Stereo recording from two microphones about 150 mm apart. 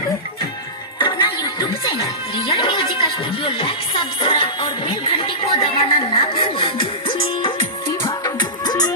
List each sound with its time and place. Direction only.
0.9 s music: 30° left (ahead or behind)
8.0 s music: 25° left (ahead or behind)